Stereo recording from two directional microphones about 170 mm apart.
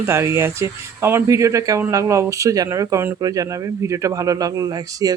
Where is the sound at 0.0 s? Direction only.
15° right (ahead or behind).